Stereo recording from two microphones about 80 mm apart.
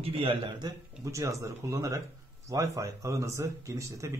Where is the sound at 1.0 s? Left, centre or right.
Right.